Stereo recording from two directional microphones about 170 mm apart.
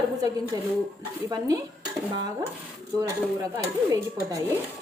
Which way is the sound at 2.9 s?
20° right (ahead or behind).